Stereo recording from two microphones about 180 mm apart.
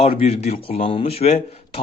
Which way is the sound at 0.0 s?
35° left (ahead or behind).